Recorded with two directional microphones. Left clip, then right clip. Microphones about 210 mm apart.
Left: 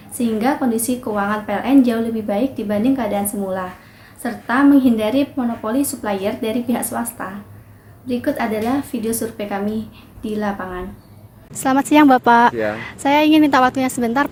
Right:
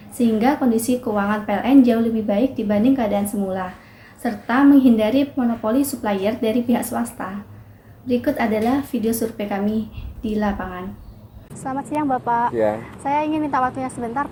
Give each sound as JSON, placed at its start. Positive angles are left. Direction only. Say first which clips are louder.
{"t": 0.2, "sound": "a woman's voice", "louder": "even", "side_deg": 0}
{"t": 11.6, "sound": "a woman's voice", "louder": "left 11 dB", "side_deg": 75}